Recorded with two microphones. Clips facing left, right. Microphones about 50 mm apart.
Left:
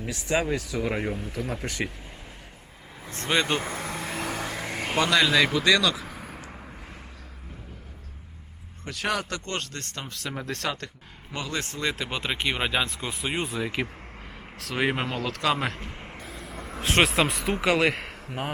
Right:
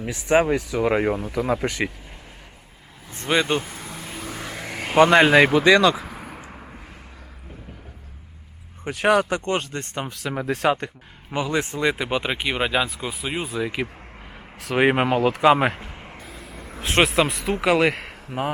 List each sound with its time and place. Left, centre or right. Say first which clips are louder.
0.0 s speech: right 7 dB; right
0.9 s speech: right 8 dB; right
1.6 s speech: right 8 dB; right
3.1 s speech: right 4 dB; centre
3.6 s vehicle: left 4 dB; left
4.5 s a sound: even; centre
4.9 s speech: right 8 dB; right
5.5 s speech: right 7 dB; right
6.0 s vehicle: right 3 dB; centre
8.8 s speech: right 10 dB; right
10.1 s speech: right 6 dB; centre
14.3 s vehicle: right 7 dB; centre
14.8 s speech: right 8 dB; right
15.8 s a sound: right 1 dB; centre